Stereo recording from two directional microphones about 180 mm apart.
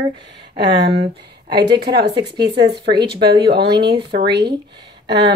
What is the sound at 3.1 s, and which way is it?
Speech, 25° right (ahead or behind).